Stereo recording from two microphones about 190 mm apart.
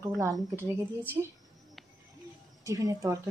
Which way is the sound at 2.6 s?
15° right (ahead or behind).